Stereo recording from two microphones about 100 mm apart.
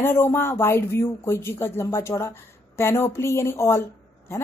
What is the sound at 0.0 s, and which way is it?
A woman's voice, 20° left (ahead or behind).